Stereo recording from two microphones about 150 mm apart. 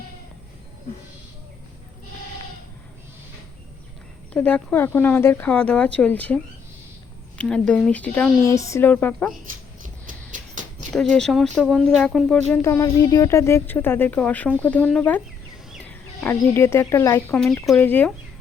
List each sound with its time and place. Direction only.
4.4 s speech: 10° left (ahead or behind)
8.4 s speech: 20° left (ahead or behind)
9.5 s a sound: 60° right (ahead or behind)
10.9 s speech: 5° left (ahead or behind)
12.6 s speech: 20° left (ahead or behind)
17.4 s speech: 5° left (ahead or behind)